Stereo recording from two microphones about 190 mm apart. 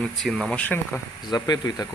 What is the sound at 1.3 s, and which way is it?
Speech, 20° left (ahead or behind).